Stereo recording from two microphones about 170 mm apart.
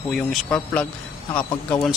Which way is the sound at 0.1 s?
5° left (ahead or behind).